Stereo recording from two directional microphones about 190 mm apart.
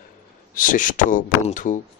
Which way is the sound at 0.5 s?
45° left (ahead or behind).